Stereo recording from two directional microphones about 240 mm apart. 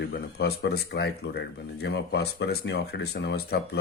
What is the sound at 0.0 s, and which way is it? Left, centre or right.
Speech, left.